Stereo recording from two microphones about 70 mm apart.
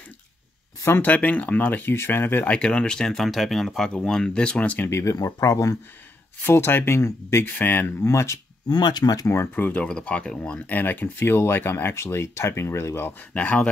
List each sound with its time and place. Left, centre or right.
0.8 s speech: left
2.5 s speech: centre
4.8 s speech: left
5.4 s speech: left
6.4 s speech: left
8.0 s speech: left
8.6 s speech: left
9.3 s speech: left
9.8 s speech: centre; by 13.1 s left
13.3 s speech: centre